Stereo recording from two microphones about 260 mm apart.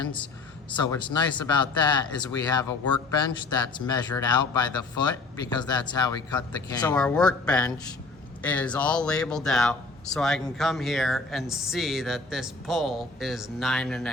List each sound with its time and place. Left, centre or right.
0.7 s speech: centre
3.8 s speech: centre
6.9 s speech: centre